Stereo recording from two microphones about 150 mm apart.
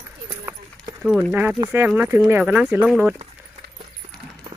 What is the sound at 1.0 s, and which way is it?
Speech, centre (ahead or behind).